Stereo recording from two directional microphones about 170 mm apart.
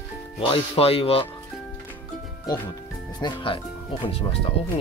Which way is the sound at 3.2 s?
30° left (ahead or behind).